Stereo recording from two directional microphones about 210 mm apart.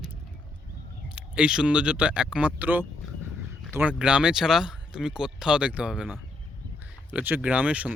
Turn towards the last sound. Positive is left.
turn(degrees=-5)  # may be behind; listen again after turning